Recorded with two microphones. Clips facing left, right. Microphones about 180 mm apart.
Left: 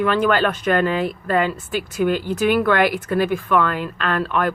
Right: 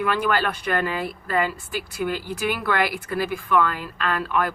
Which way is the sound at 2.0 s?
55° left (ahead or behind).